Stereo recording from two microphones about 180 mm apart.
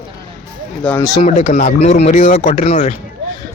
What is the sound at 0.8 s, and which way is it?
Speech, 10° left (ahead or behind).